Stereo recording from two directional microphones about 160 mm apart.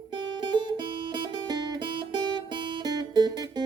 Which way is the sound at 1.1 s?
30° right (ahead or behind).